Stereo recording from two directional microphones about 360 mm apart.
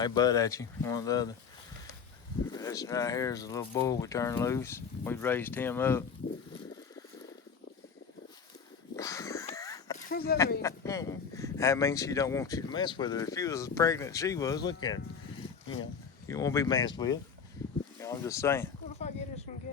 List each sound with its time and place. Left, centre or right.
0.0 s speech: centre
2.5 s speech: centre
9.0 s a sound: centre
10.1 s speech: left
10.6 s speech: centre
16.2 s speech: centre
18.9 s a sound: centre